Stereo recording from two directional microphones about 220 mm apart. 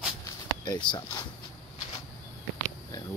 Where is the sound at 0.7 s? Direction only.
20° left (ahead or behind).